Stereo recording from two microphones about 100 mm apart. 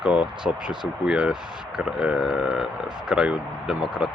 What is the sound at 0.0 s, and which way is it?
Speech, 10° right (ahead or behind).